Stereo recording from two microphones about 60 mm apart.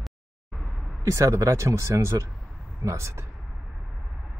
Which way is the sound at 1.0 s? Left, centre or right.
Right.